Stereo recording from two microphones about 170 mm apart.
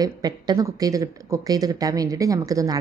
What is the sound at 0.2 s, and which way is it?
Speech, 20° right (ahead or behind).